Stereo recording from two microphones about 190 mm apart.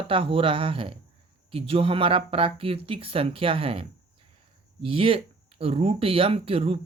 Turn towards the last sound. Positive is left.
turn(degrees=-30)  # may be behind; listen again after turning